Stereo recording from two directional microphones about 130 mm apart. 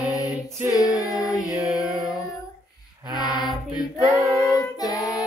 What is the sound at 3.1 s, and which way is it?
Female singing, centre (ahead or behind).